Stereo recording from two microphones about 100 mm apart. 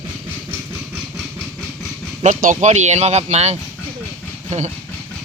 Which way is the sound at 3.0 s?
90° right.